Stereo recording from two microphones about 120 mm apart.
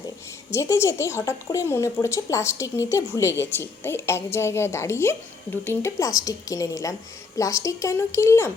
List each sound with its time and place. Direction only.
0.5 s a woman's voice: 25° left (ahead or behind)